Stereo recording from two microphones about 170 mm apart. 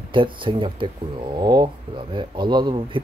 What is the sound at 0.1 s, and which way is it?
Speech, 30° right (ahead or behind).